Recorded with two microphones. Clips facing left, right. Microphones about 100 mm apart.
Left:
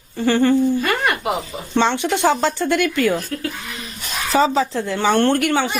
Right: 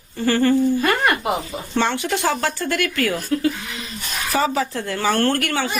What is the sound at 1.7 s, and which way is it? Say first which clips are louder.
A woman's voice: left 3 dB; 20° left (ahead or behind).